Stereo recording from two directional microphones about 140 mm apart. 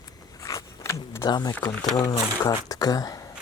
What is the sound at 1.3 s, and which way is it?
Speech, 30° left (ahead or behind).